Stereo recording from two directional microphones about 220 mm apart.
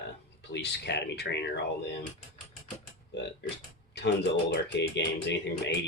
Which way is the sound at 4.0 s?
50° left (ahead or behind).